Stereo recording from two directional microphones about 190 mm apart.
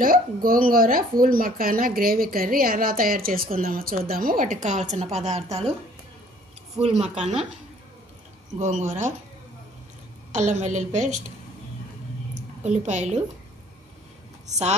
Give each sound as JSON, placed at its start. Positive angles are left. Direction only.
{"t": 0.0, "sound": "a woman's voice", "side_deg": -50}
{"t": 6.8, "sound": "a woman's voice", "side_deg": -35}
{"t": 8.5, "sound": "a woman's voice", "side_deg": -40}
{"t": 10.3, "sound": "a woman's voice", "side_deg": -40}
{"t": 12.6, "sound": "a woman's voice", "side_deg": -35}